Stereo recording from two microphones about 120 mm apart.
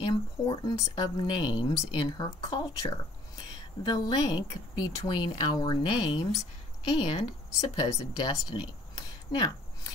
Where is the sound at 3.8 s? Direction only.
30° left (ahead or behind).